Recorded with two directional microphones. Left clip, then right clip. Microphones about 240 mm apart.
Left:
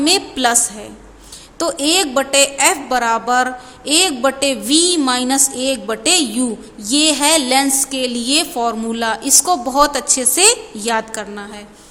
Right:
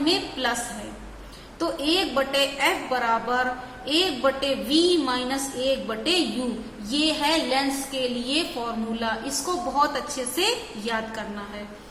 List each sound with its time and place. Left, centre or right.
0.0 s a woman's voice: left
1.5 s a woman's voice: left